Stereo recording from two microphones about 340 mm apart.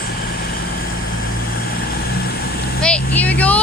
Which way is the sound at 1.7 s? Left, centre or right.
Left.